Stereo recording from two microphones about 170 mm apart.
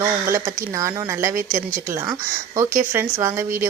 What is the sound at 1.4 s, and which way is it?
Speech, 50° right (ahead or behind).